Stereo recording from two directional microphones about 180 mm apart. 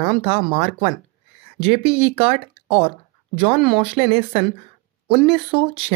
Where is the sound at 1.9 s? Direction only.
30° right (ahead or behind).